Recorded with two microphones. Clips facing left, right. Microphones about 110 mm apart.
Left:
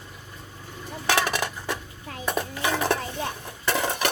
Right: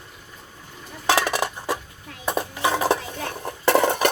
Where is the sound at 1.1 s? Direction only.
30° right (ahead or behind).